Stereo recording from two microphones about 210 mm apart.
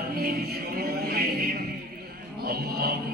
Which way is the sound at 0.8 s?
45° right (ahead or behind).